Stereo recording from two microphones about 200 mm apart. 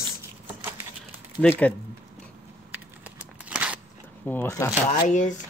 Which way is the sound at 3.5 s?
5° right (ahead or behind).